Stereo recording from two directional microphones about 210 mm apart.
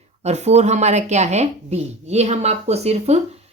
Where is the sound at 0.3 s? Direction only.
30° right (ahead or behind).